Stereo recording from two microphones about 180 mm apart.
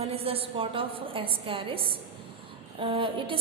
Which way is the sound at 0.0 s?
35° right (ahead or behind).